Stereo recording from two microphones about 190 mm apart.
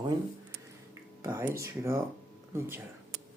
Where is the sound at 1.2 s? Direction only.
10° right (ahead or behind).